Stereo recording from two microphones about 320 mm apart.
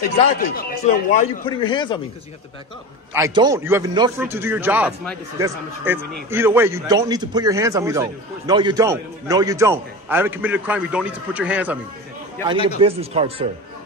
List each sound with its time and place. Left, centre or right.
0.4 s speech: left
1.4 s speech: centre
3.1 s a man's voice: centre
12.8 s a man's voice: centre